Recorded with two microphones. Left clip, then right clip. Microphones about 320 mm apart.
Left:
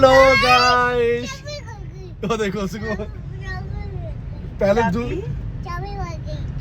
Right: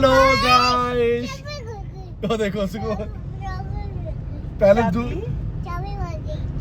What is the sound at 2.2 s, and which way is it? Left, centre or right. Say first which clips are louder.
Speech: even; centre.